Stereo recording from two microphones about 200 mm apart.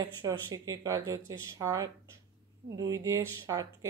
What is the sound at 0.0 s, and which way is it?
Speech, 20° right (ahead or behind).